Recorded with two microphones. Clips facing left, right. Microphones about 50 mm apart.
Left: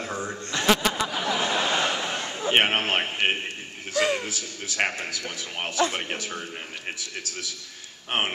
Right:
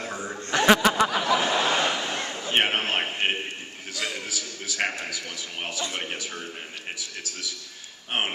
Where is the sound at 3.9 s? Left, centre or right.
Left.